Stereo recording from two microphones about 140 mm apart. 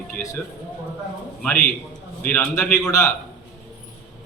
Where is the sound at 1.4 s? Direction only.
5° left (ahead or behind).